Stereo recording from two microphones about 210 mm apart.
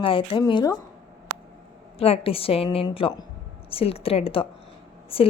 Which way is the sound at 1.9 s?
30° left (ahead or behind).